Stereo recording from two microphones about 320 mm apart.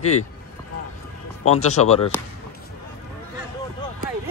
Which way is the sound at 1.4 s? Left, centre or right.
Left.